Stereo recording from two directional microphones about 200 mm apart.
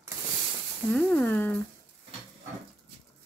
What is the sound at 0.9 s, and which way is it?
Speech, 5° left (ahead or behind).